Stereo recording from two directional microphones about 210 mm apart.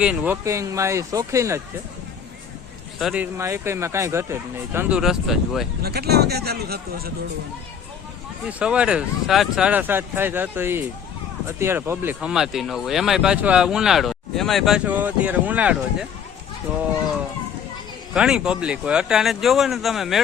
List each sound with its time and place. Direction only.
0.0 s speech: 5° right (ahead or behind)
3.0 s speech: 5° right (ahead or behind)
5.8 s a man's voice: 50° right (ahead or behind)
8.4 s speech: 5° right (ahead or behind)
18.1 s speech: 5° right (ahead or behind)